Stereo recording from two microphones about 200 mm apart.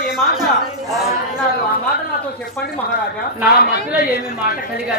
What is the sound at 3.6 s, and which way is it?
Speech, 50° left (ahead or behind).